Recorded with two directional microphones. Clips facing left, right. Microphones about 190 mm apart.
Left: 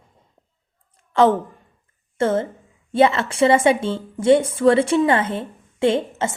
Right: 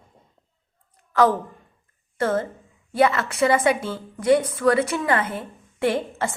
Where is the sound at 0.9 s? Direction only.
25° left (ahead or behind).